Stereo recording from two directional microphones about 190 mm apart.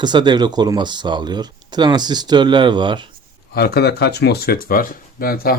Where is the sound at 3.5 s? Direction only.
55° left (ahead or behind).